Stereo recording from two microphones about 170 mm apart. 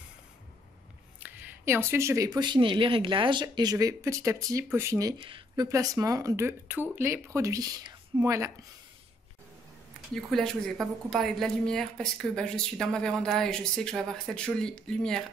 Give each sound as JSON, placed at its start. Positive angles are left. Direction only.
{"t": 1.2, "sound": "speech", "side_deg": -10}
{"t": 5.2, "sound": "speech", "side_deg": -30}
{"t": 5.7, "sound": "speech", "side_deg": -20}
{"t": 10.1, "sound": "a woman's voice", "side_deg": 5}